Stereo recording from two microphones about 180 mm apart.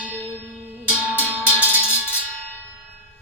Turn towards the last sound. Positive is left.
turn(degrees=-10)  # may be behind; listen again after turning